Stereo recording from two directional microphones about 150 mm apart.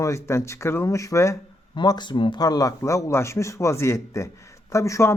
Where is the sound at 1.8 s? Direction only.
30° left (ahead or behind).